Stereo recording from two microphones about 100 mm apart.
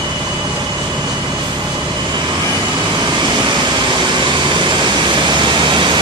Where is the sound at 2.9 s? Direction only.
45° right (ahead or behind).